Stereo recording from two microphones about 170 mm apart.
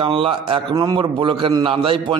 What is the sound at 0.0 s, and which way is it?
A man's voice, 30° right (ahead or behind).